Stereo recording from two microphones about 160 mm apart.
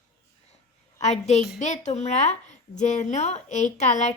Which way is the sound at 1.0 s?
45° left (ahead or behind).